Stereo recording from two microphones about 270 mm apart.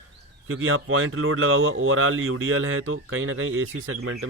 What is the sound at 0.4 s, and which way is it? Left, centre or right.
Speech, right.